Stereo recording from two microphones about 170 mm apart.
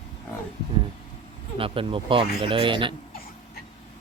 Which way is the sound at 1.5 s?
30° right (ahead or behind).